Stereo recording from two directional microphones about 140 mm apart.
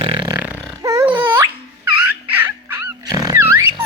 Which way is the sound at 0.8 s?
25° right (ahead or behind).